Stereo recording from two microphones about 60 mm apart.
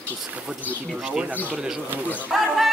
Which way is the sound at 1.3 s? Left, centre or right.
Left.